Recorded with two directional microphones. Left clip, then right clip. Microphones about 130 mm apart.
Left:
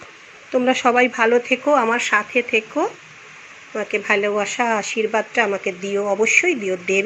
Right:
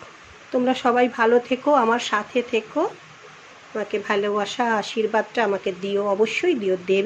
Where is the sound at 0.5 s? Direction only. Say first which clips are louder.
Left 3 dB; 15° left (ahead or behind).